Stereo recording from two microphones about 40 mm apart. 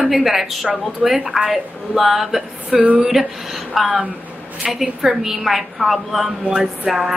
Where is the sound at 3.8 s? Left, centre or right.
Right.